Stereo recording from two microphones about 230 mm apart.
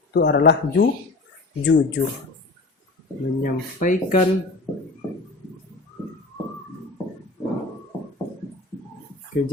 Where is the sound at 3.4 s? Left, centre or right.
Left.